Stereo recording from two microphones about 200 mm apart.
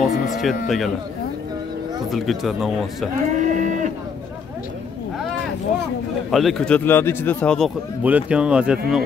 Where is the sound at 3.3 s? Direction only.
40° right (ahead or behind).